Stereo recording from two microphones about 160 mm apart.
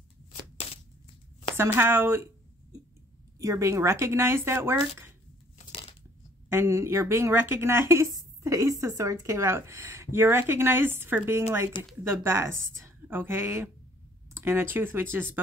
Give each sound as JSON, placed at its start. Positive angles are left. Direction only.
{"t": 1.6, "sound": "speech", "side_deg": -15}
{"t": 3.3, "sound": "speech", "side_deg": -20}
{"t": 5.7, "sound": "tearing", "side_deg": 35}
{"t": 6.5, "sound": "speech", "side_deg": -15}